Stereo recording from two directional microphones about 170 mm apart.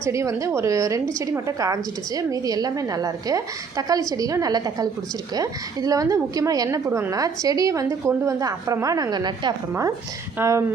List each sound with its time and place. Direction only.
0.0 s a woman's voice: 15° right (ahead or behind)